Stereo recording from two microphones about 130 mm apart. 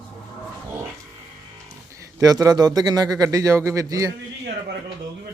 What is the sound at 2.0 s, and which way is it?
A man's voice, 25° right (ahead or behind).